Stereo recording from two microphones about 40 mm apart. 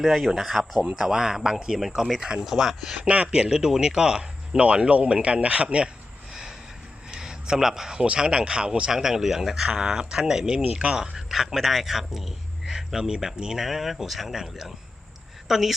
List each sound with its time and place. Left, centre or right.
0.0 s speech: centre; by 2.2 s right
2.4 s speech: centre
3.0 s speech: right
4.9 s speech: right
7.1 s a sound: centre
8.1 s speech: right
9.0 s speech: centre
11.3 s a man's voice: centre